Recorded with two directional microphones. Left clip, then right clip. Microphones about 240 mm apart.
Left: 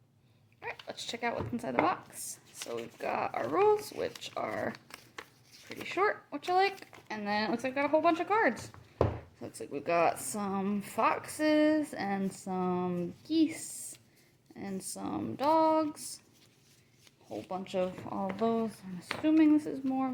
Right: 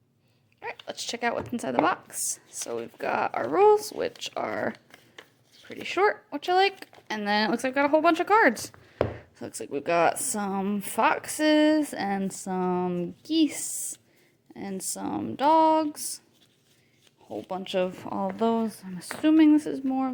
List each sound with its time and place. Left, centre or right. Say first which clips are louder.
0.9 s speech: right 7 dB; right
5.8 s speech: right 6 dB; right
17.2 s speech: right 5 dB; right